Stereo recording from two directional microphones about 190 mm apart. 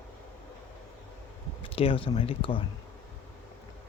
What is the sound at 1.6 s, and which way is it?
Speech, 30° left (ahead or behind).